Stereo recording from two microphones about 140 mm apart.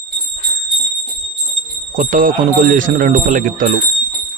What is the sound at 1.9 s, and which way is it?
Speech, 75° right (ahead or behind).